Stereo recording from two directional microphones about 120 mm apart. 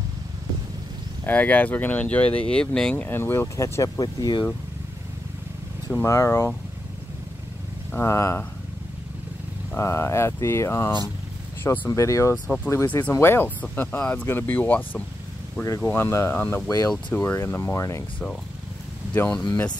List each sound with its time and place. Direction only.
1.2 s speech: 15° left (ahead or behind)
4.0 s speech: 35° left (ahead or behind)
6.0 s speech: 20° left (ahead or behind)
7.9 s speech: 25° left (ahead or behind)
9.8 s speech: 25° left (ahead or behind)
11.9 s speech: 25° left (ahead or behind)
16.6 s speech: 30° left (ahead or behind)
17.2 s speech: 15° left (ahead or behind)
19.1 s speech: 10° left (ahead or behind)